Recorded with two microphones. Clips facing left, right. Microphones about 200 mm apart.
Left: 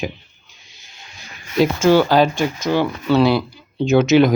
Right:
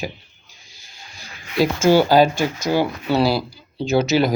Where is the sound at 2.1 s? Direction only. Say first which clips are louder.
Even; 5° right (ahead or behind).